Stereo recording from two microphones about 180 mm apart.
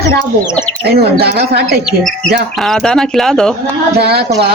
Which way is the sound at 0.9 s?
65° right (ahead or behind).